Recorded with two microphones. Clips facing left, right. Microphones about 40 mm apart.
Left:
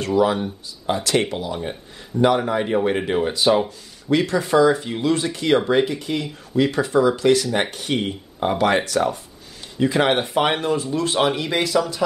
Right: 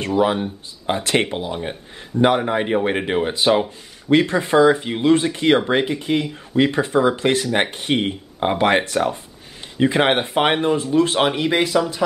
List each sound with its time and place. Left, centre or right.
0.0 s speech: right